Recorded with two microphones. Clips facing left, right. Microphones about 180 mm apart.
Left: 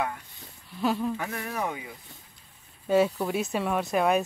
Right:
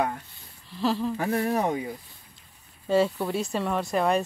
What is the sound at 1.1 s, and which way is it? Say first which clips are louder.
Speech: right 8 dB; 40° right (ahead or behind).